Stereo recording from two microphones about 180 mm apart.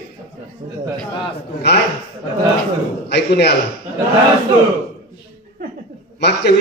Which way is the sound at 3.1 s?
65° left (ahead or behind).